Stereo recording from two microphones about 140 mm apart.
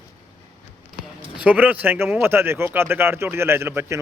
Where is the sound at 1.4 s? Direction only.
10° right (ahead or behind).